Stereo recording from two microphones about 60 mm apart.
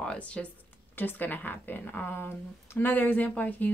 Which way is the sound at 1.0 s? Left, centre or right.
Left.